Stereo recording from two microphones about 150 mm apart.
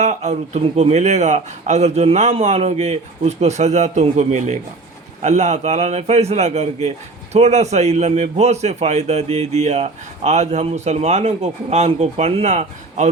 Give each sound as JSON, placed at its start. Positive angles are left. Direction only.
{"t": 0.0, "sound": "a man's voice", "side_deg": -50}